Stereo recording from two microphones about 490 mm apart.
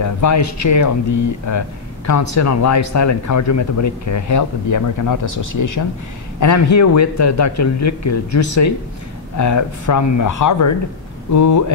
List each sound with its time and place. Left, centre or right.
0.0 s speech: left